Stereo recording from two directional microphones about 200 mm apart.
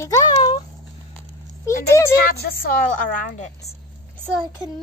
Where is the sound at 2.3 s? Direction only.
45° left (ahead or behind).